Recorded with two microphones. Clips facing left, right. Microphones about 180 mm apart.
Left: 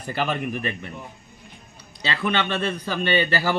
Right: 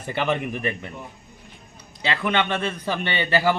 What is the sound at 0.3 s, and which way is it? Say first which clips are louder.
Speech: right 2 dB; 20° right (ahead or behind).